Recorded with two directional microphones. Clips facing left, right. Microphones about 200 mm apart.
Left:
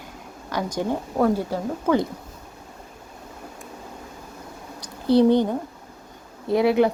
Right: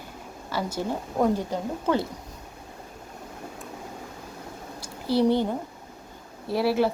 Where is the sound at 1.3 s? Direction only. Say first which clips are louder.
Left 3 dB; 10° left (ahead or behind).